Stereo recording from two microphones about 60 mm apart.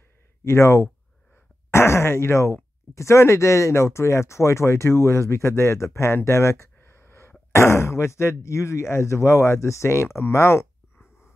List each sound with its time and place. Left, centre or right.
0.4 s speech: left